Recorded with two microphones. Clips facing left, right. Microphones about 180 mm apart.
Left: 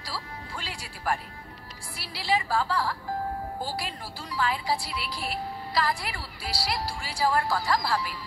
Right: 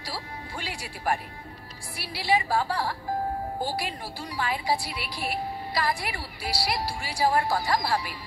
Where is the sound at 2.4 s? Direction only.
25° right (ahead or behind).